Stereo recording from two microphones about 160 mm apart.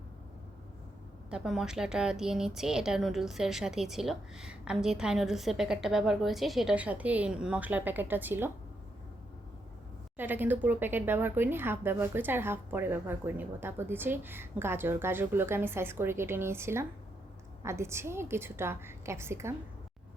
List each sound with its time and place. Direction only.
1.3 s a woman's voice: 5° right (ahead or behind)
10.2 s speech: 10° right (ahead or behind)